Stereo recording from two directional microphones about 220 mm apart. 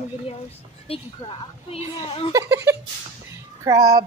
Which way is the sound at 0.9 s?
25° left (ahead or behind).